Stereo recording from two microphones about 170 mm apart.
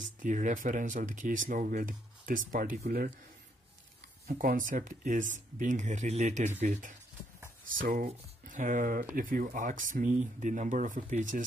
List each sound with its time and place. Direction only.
0.2 s speech: 50° right (ahead or behind)
4.3 s speech: 50° right (ahead or behind)